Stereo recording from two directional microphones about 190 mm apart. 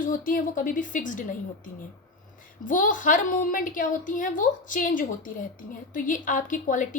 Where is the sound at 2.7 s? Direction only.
45° left (ahead or behind).